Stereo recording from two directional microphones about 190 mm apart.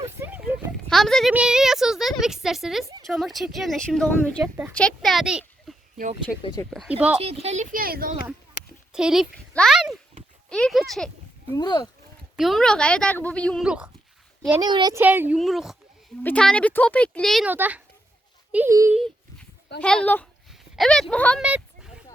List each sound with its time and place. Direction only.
0.2 s speech: 10° right (ahead or behind)
0.9 s a woman's voice: centre (ahead or behind)
7.2 s speech: 30° right (ahead or behind); by 8.1 s 50° right (ahead or behind)
8.9 s speech: 5° right (ahead or behind)
11.5 s speech: 20° left (ahead or behind)
12.4 s speech: centre (ahead or behind)
14.6 s speech: 20° right (ahead or behind)
15.0 s speech: 10° right (ahead or behind)
18.9 s a sound: centre (ahead or behind)
19.8 s speech: 5° left (ahead or behind)